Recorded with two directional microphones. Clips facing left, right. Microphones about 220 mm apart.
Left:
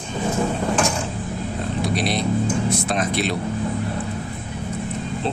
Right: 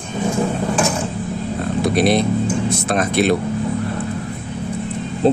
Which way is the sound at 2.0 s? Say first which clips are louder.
Right 7 dB; 55° right (ahead or behind).